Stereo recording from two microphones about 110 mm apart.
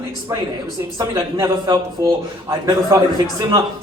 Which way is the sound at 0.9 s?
35° right (ahead or behind).